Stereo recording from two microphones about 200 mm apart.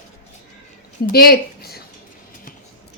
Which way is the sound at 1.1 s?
50° left (ahead or behind).